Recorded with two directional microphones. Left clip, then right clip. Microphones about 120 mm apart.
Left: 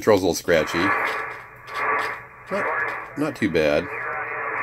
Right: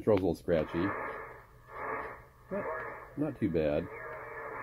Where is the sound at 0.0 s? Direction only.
20° left (ahead or behind).